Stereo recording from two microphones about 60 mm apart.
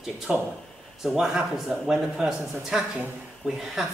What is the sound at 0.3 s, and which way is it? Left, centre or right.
Speech, centre.